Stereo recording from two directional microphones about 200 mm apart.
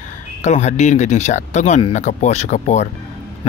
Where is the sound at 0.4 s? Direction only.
35° left (ahead or behind).